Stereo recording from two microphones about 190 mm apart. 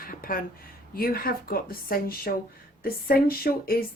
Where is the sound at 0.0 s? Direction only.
50° left (ahead or behind).